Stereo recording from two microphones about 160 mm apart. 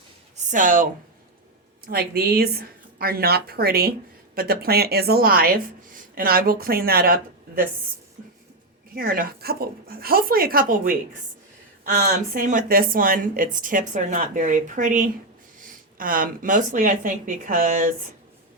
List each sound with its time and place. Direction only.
0.5 s speech: 55° right (ahead or behind)
1.9 s speech: 75° right (ahead or behind)
9.0 s speech: 65° right (ahead or behind)